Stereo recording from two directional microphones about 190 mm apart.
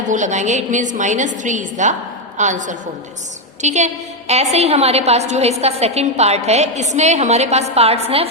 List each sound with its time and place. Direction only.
0.1 s a woman's voice: 40° right (ahead or behind)